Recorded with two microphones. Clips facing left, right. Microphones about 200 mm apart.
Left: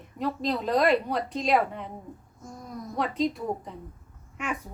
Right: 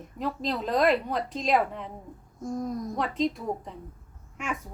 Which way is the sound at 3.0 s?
Centre (ahead or behind).